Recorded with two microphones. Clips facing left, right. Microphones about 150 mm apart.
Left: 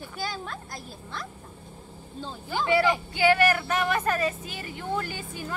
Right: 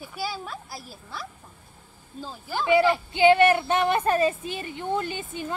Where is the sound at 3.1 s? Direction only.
25° right (ahead or behind).